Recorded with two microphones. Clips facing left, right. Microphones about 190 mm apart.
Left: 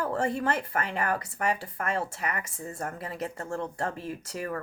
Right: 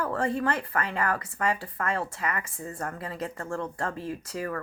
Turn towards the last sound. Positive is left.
turn(degrees=20)  # may be behind; listen again after turning